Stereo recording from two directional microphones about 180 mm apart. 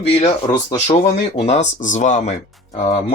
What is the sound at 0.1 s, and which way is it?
Speech, 35° left (ahead or behind).